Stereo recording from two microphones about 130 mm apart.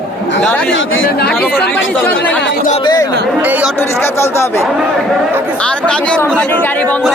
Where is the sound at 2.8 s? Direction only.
35° left (ahead or behind).